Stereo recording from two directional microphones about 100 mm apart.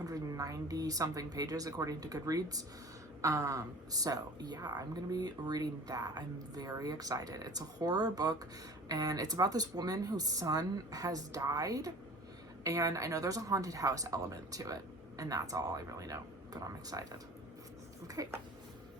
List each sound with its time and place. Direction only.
0.0 s a woman's voice: 35° right (ahead or behind)